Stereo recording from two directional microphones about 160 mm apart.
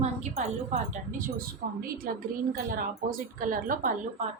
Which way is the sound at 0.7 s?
50° right (ahead or behind).